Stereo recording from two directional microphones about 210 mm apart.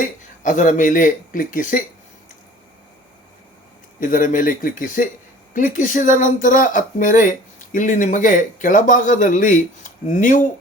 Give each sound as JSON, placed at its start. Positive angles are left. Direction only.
{"t": 0.2, "sound": "speech", "side_deg": 35}
{"t": 4.0, "sound": "speech", "side_deg": 40}